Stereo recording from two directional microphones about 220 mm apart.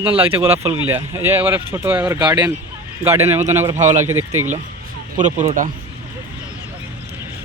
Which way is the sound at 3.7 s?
35° right (ahead or behind).